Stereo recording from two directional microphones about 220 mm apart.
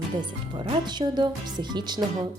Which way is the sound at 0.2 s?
20° right (ahead or behind).